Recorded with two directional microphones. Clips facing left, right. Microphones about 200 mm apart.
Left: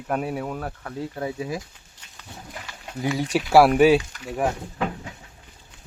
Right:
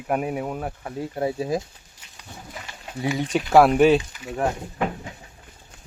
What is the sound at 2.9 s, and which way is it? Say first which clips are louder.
Speech: even; centre (ahead or behind).